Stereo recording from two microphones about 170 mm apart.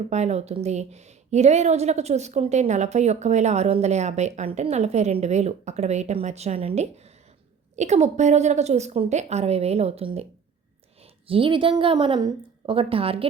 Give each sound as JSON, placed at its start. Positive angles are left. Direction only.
{"t": 0.1, "sound": "a woman's voice", "side_deg": -40}